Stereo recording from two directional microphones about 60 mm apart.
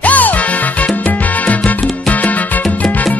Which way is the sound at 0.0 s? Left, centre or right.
Left.